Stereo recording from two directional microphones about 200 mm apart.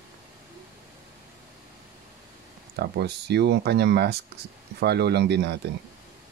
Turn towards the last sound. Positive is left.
turn(degrees=-55)  # may be behind; listen again after turning